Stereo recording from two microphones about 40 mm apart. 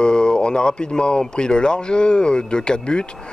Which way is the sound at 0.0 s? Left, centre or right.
Left.